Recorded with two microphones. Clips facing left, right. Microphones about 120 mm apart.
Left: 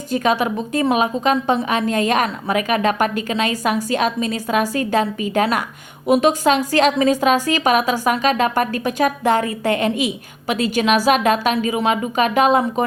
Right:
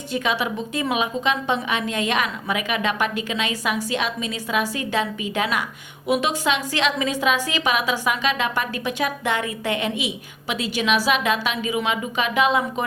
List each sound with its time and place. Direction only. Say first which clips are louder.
0.1 s a woman's voice: left 6 dB; 45° left (ahead or behind)